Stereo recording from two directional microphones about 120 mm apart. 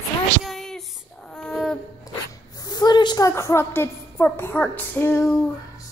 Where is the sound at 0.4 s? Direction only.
5° left (ahead or behind).